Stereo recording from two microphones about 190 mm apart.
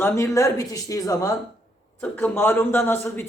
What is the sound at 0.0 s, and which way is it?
A man's voice, 15° left (ahead or behind).